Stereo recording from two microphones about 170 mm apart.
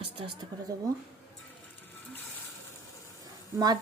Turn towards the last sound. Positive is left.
turn(degrees=-20)  # may be behind; listen again after turning